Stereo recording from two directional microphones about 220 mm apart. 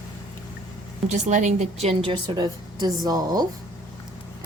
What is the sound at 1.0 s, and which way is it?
Speech, 35° right (ahead or behind).